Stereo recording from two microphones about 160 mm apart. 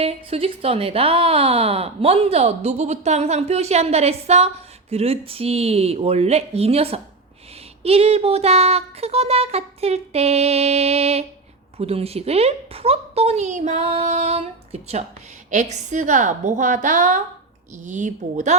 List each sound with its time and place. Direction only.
0.0 s a woman's voice: 40° right (ahead or behind)